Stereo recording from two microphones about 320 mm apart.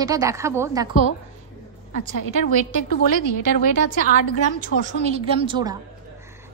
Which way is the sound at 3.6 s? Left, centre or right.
Left.